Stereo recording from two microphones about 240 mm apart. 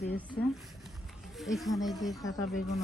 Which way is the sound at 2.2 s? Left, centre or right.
Centre.